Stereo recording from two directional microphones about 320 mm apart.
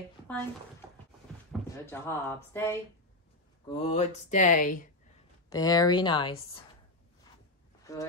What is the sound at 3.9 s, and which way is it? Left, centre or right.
Speech, left.